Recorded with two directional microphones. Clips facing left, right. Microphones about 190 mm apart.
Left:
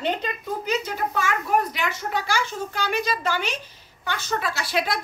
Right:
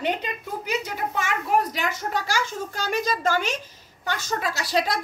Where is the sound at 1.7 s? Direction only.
40° right (ahead or behind).